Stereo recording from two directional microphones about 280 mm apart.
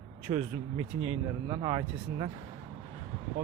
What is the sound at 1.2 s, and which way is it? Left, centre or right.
Speech, centre.